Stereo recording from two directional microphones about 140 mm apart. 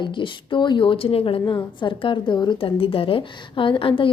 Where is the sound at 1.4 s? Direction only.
30° left (ahead or behind).